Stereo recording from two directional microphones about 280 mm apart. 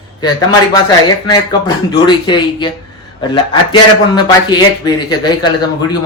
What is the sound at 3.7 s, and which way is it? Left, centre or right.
A man's voice, centre.